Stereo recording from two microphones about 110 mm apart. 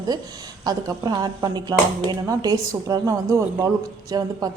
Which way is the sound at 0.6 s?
35° right (ahead or behind).